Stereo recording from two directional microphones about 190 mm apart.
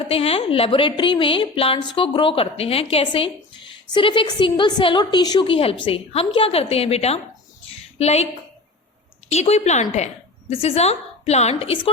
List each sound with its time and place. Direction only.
0.1 s a woman's voice: 30° left (ahead or behind)
9.3 s a woman's voice: 35° left (ahead or behind)